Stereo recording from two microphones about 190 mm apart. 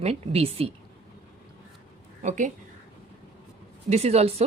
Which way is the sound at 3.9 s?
35° right (ahead or behind).